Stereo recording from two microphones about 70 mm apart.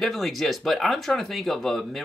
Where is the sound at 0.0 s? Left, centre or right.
Centre.